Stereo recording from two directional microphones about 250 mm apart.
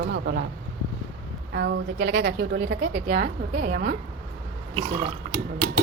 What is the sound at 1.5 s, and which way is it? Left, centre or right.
A woman's voice, right.